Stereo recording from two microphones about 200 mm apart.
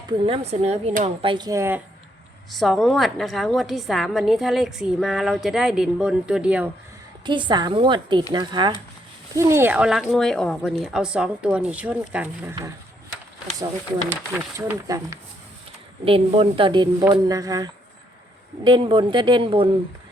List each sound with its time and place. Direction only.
0.1 s speech: 30° right (ahead or behind); by 1.8 s 15° right (ahead or behind)
2.5 s a woman's voice: centre (ahead or behind)
7.3 s a woman's voice: 25° right (ahead or behind); by 12.5 s 10° right (ahead or behind)
14.3 s speech: 10° right (ahead or behind)
16.0 s speech: 30° right (ahead or behind)